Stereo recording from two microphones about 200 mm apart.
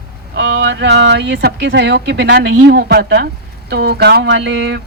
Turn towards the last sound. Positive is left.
turn(degrees=-60)  # may be behind; listen again after turning